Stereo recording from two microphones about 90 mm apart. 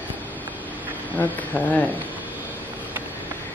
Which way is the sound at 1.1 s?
20° left (ahead or behind).